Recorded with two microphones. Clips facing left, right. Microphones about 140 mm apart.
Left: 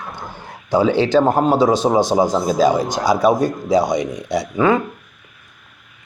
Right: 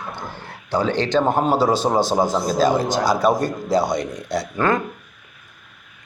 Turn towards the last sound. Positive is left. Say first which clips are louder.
# left 4 dB
turn(degrees=5)  # may be behind; listen again after turning